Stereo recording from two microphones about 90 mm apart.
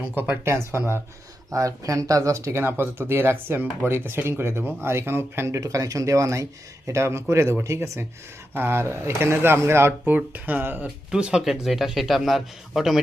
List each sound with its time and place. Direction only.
0.2 s speech: 25° right (ahead or behind); by 13.0 s 5° right (ahead or behind)